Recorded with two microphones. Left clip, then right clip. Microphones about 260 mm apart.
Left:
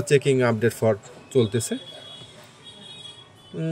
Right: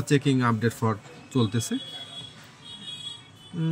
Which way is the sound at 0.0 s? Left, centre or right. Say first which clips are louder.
Left 5 dB; centre.